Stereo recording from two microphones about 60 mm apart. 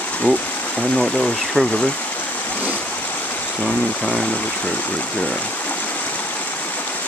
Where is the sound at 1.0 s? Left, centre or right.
Centre.